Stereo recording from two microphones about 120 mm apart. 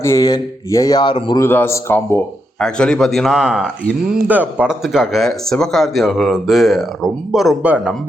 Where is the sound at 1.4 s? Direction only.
20° left (ahead or behind).